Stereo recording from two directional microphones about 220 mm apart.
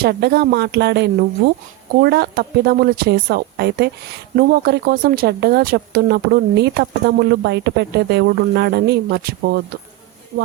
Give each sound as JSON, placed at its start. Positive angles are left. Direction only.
{"t": 0.0, "sound": "speech", "side_deg": -45}